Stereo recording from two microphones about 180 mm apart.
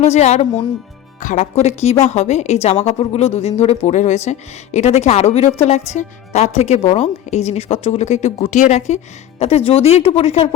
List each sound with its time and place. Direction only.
0.0 s speech: 40° left (ahead or behind)